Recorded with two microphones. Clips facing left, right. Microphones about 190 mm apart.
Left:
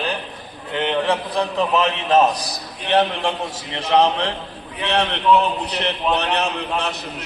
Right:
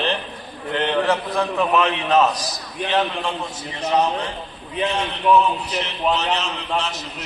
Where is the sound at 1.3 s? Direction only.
20° left (ahead or behind).